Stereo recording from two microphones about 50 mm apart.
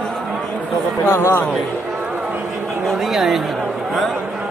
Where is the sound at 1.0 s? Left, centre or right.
Left.